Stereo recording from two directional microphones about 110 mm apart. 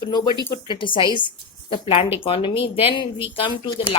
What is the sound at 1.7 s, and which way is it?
Speech, 55° left (ahead or behind).